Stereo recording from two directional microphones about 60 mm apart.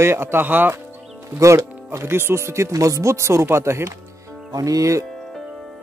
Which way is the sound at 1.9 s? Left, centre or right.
Right.